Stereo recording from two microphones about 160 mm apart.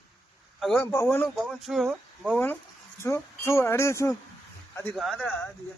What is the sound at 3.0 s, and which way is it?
Speech, 15° left (ahead or behind).